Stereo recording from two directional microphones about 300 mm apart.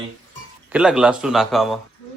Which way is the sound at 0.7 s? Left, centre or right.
Centre.